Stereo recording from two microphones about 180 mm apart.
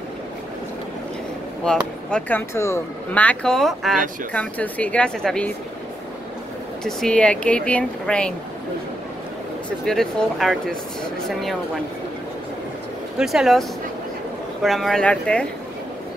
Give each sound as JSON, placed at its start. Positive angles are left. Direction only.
{"t": 1.6, "sound": "speech", "side_deg": 5}
{"t": 6.8, "sound": "speech", "side_deg": 5}
{"t": 9.8, "sound": "speech", "side_deg": 0}
{"t": 13.2, "sound": "speech", "side_deg": 0}